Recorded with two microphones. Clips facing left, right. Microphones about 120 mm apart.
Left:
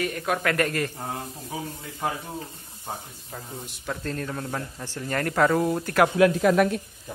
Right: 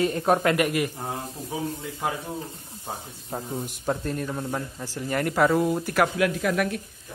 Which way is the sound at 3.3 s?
45° right (ahead or behind).